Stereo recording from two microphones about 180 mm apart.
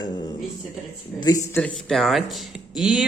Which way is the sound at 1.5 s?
5° left (ahead or behind).